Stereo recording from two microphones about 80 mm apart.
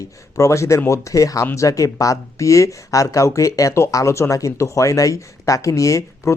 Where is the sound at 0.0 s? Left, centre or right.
Left.